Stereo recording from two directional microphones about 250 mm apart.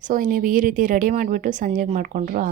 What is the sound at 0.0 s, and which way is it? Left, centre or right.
A woman's voice, right.